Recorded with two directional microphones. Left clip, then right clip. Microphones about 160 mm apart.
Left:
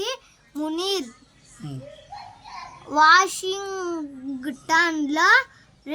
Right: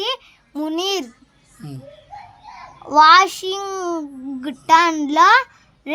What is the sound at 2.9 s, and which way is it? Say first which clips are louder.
A child's voice: right 5 dB; 50° right (ahead or behind).